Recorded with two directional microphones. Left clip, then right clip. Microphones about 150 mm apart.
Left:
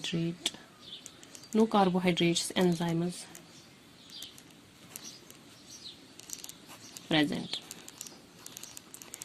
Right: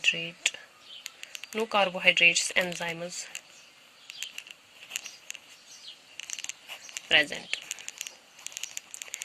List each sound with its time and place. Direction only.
0.0 s a sound: 20° right (ahead or behind)
1.5 s speech: 15° right (ahead or behind)
6.9 s speech: 15° right (ahead or behind)